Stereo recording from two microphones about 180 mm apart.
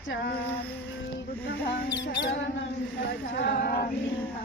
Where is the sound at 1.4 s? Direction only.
65° left (ahead or behind).